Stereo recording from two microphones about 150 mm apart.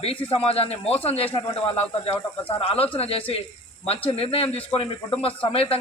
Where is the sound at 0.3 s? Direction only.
40° left (ahead or behind).